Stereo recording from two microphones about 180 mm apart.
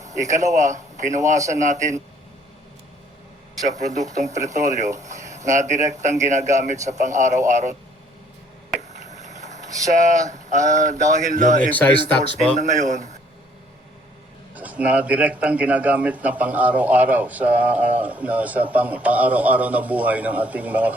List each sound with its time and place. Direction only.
0.1 s speech: 40° right (ahead or behind)
3.7 s a man's voice: 40° right (ahead or behind)
4.9 s a sound: 40° right (ahead or behind)
5.5 s a man's voice: 40° right (ahead or behind)
9.0 s a sound: 40° right (ahead or behind)
9.9 s speech: 40° right (ahead or behind)
11.7 s speech: 10° left (ahead or behind)
12.5 s a man's voice: 40° right (ahead or behind)
14.5 s a man's voice: 10° right (ahead or behind)